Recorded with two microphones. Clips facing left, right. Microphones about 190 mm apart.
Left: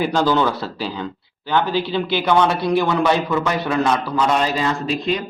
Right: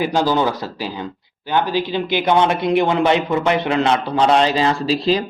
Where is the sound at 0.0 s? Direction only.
15° right (ahead or behind).